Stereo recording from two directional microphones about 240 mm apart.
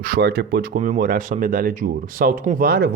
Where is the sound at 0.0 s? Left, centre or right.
Right.